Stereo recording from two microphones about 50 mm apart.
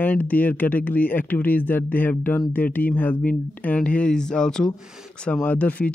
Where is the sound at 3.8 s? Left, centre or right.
Left.